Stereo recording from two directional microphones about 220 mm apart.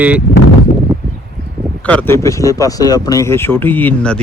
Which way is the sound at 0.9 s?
15° right (ahead or behind).